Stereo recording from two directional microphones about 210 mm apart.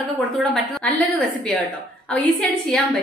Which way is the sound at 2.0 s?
5° left (ahead or behind).